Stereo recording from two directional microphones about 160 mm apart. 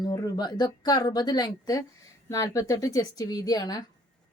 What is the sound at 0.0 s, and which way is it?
A woman's voice, 25° left (ahead or behind).